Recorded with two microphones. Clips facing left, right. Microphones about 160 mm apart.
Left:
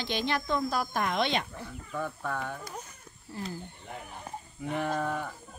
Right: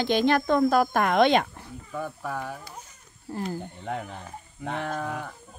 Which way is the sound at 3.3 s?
50° right (ahead or behind).